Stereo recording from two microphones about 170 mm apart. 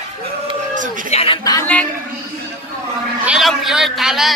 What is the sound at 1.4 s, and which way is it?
Speech, 20° left (ahead or behind).